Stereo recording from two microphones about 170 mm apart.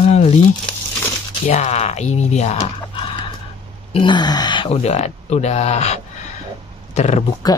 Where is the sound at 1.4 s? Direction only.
40° left (ahead or behind).